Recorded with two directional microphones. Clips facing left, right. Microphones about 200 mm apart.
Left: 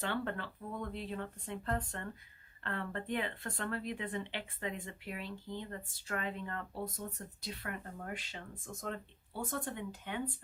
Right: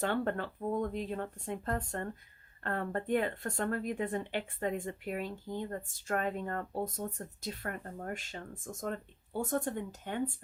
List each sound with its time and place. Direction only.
0.0 s speech: 45° right (ahead or behind)